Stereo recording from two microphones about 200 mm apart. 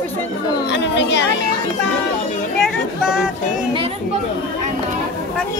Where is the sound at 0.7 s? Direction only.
60° left (ahead or behind).